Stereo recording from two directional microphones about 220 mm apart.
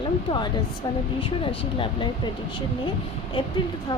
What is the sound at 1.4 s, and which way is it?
Speech, 25° left (ahead or behind).